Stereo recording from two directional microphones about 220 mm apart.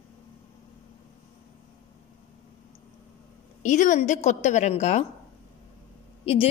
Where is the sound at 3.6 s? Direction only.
35° left (ahead or behind).